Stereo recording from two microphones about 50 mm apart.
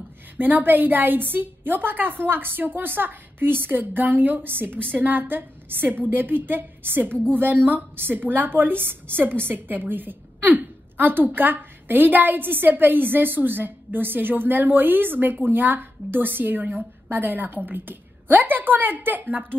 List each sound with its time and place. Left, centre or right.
0.4 s a woman's voice: right